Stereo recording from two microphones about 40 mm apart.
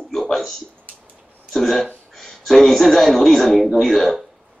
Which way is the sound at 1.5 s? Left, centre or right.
Centre.